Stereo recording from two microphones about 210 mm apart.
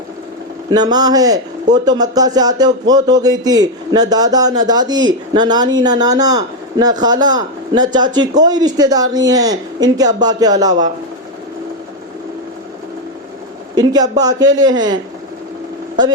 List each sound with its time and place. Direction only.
0.7 s speech: 20° right (ahead or behind)
13.7 s speech: 20° right (ahead or behind)